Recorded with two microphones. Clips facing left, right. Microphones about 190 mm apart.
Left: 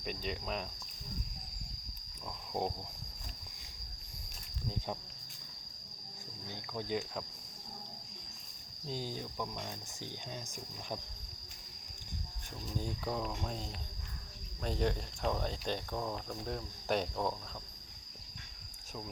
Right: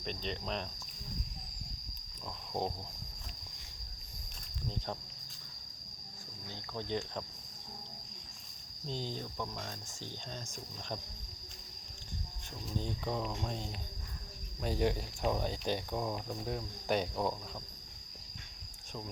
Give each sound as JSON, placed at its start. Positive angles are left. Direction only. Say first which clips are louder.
{"t": 0.0, "sound": "speech", "louder": "even", "side_deg": 5}
{"t": 2.5, "sound": "speech", "louder": "even", "side_deg": 0}
{"t": 6.7, "sound": "speech", "louder": "even", "side_deg": 10}
{"t": 8.9, "sound": "speech", "louder": "even", "side_deg": 10}
{"t": 12.6, "sound": "speech", "louder": "right 1 dB", "side_deg": 5}